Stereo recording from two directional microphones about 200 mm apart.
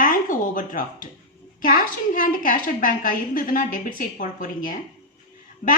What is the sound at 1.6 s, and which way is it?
A woman's voice, 45° left (ahead or behind).